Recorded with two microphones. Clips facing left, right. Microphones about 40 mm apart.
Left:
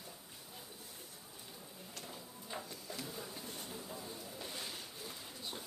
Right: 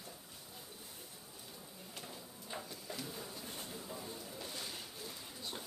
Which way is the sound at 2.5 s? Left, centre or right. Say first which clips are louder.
Even; centre.